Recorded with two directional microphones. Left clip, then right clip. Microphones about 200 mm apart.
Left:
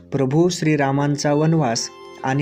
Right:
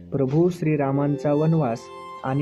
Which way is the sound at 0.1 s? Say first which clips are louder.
Left 3 dB; 20° left (ahead or behind).